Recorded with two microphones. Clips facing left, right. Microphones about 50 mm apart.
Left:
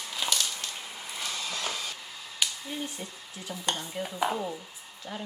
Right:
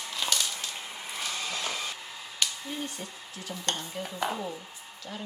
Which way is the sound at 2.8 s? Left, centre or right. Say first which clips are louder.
Even; centre.